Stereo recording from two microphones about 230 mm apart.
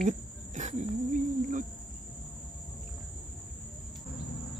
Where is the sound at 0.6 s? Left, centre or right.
Right.